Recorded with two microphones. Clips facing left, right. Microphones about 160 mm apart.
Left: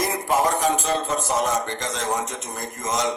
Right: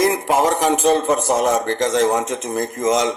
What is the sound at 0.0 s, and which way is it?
A man's voice, 80° right.